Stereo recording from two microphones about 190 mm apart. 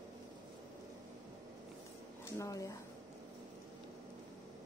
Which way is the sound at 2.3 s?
15° left (ahead or behind).